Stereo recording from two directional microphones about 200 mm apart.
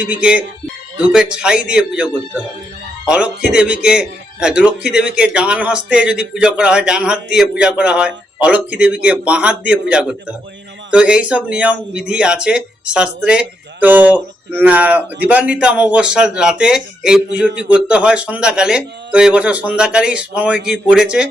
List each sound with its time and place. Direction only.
0.0 s a man's voice: 5° right (ahead or behind)
3.1 s a man's voice: 5° right (ahead or behind)